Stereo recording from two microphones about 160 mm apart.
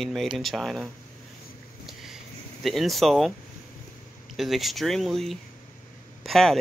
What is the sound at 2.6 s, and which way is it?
Speech, centre (ahead or behind).